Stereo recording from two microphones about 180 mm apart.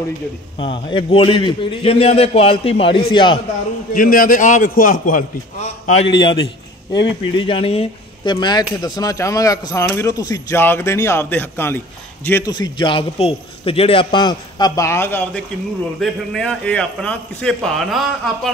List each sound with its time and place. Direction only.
0.6 s a man's voice: 30° left (ahead or behind)
3.9 s a man's voice: 50° left (ahead or behind)
6.1 s a man's voice: 25° left (ahead or behind); by 18.5 s centre (ahead or behind)